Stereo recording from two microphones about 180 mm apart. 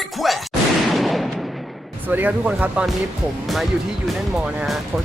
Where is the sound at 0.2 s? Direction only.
Centre (ahead or behind).